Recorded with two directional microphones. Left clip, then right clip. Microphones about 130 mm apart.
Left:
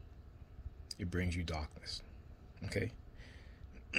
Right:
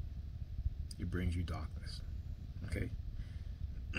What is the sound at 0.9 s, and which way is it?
Speech, 20° right (ahead or behind).